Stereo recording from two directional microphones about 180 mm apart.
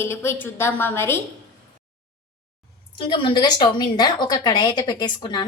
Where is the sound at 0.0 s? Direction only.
15° left (ahead or behind).